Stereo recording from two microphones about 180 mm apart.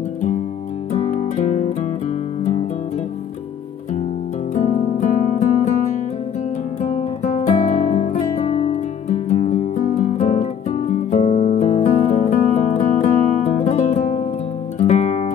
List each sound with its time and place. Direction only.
0.9 s music: 40° left (ahead or behind)
4.6 s music: 40° left (ahead or behind)
6.8 s guitar: 40° left (ahead or behind)
12.1 s music: 40° left (ahead or behind)